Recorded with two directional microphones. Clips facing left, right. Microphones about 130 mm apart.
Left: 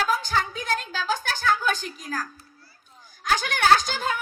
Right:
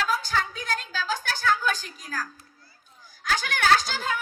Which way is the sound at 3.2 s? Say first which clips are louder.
Left 3 dB; 20° left (ahead or behind).